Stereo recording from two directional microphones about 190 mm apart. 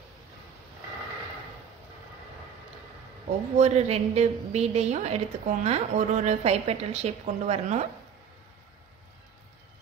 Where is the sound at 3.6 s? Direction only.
35° right (ahead or behind).